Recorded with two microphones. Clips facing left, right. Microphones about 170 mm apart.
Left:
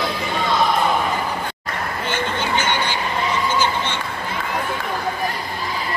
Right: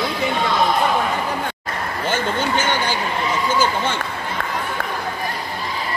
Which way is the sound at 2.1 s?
45° right (ahead or behind).